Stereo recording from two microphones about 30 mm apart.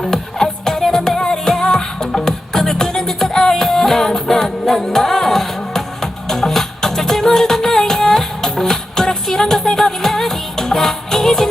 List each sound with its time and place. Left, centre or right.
0.0 s music: centre